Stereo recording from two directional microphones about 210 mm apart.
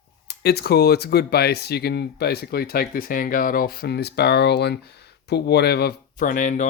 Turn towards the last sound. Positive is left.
turn(degrees=35)  # may be behind; listen again after turning